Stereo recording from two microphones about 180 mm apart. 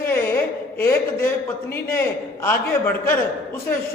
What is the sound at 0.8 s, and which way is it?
A man's voice, 15° left (ahead or behind).